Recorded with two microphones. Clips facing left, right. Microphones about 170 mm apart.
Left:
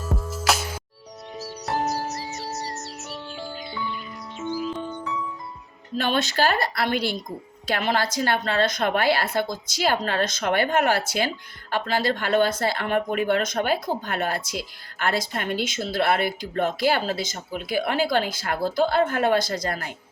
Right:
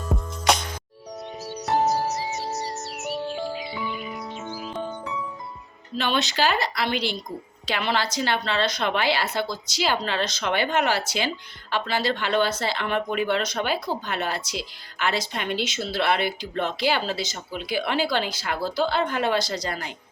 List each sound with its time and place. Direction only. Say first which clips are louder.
0.1 s music: right 2 dB; 5° left (ahead or behind)
1.9 s music: right 4 dB; centre (ahead or behind)
6.0 s speech: left 1 dB; 50° left (ahead or behind)